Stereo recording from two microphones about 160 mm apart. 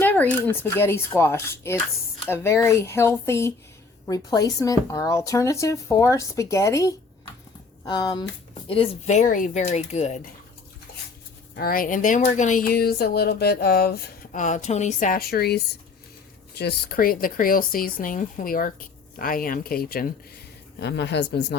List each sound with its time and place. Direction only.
0.0 s speech: 10° left (ahead or behind); by 8.3 s 25° left (ahead or behind)
8.7 s speech: 40° left (ahead or behind)
11.5 s speech: 65° left (ahead or behind)
14.4 s speech: 50° left (ahead or behind); by 20.1 s 70° left (ahead or behind)
20.7 s a woman's voice: 90° left